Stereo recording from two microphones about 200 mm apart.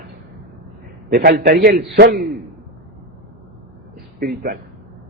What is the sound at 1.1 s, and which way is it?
Speech, 50° right (ahead or behind).